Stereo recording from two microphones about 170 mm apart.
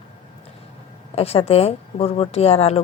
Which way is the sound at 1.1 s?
35° left (ahead or behind).